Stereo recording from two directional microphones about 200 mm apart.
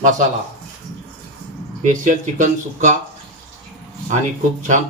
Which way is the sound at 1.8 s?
40° right (ahead or behind).